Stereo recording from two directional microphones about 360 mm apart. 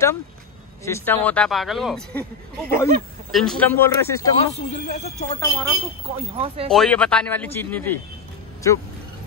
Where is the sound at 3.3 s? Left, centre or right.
Centre.